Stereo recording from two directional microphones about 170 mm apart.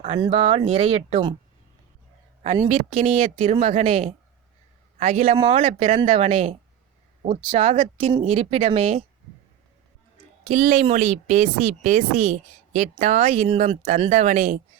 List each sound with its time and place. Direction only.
0.3 s speech: 35° right (ahead or behind)
2.6 s speech: 35° right (ahead or behind)
10.5 s speech: 50° right (ahead or behind)